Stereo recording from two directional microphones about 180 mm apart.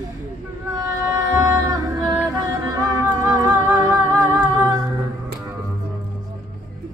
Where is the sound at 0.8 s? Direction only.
15° right (ahead or behind).